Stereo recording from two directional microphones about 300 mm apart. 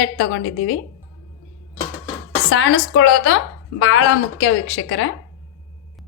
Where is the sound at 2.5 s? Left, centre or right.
Left.